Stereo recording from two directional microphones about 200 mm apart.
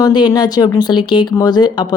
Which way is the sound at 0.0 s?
20° left (ahead or behind).